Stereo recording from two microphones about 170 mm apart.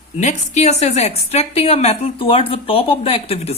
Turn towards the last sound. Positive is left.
turn(degrees=35)  # may be behind; listen again after turning